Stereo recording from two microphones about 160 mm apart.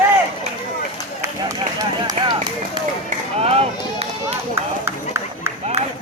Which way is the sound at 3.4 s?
40° right (ahead or behind).